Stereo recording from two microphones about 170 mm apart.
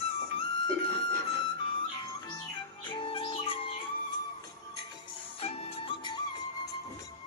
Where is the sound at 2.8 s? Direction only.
30° left (ahead or behind).